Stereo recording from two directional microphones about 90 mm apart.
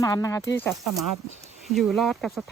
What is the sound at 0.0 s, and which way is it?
Speech, 40° left (ahead or behind).